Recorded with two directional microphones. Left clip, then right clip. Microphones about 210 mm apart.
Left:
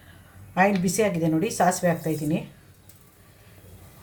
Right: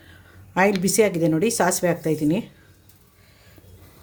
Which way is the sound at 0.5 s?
55° right (ahead or behind).